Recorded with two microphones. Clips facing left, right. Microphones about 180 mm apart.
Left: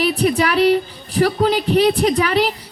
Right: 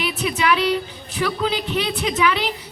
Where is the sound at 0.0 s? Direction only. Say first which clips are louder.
Left 6 dB; 40° left (ahead or behind).